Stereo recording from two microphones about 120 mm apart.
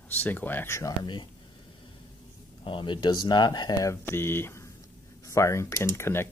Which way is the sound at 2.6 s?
45° left (ahead or behind).